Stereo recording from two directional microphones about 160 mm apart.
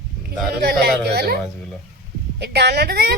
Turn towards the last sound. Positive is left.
turn(degrees=-75)  # may be behind; listen again after turning